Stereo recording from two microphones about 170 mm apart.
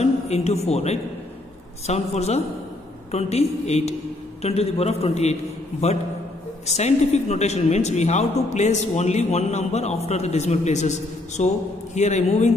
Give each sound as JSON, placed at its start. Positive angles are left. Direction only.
{"t": 0.0, "sound": "speech", "side_deg": 40}